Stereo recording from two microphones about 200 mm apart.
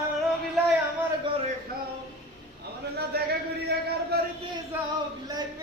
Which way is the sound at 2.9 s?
50° right (ahead or behind).